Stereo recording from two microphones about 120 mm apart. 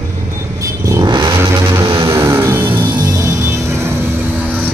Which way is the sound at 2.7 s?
40° right (ahead or behind).